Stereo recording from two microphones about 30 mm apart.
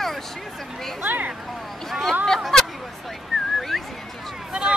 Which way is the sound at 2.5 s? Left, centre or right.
Centre.